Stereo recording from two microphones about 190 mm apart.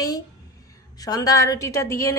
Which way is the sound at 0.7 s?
20° left (ahead or behind).